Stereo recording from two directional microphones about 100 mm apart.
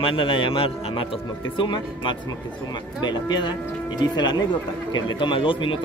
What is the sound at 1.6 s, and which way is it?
Speech, 55° left (ahead or behind).